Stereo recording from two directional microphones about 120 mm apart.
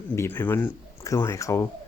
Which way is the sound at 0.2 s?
15° left (ahead or behind).